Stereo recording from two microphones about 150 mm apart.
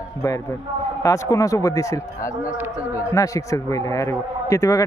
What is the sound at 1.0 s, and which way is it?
Speech, 20° left (ahead or behind).